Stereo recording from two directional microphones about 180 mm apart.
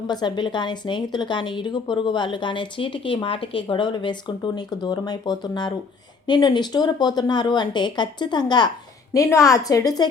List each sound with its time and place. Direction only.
0.1 s a woman's voice: 25° left (ahead or behind)